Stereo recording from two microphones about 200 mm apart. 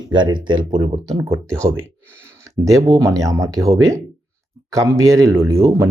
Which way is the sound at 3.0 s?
15° right (ahead or behind).